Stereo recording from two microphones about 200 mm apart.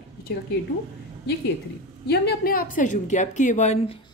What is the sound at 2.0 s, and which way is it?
Speech, 55° left (ahead or behind).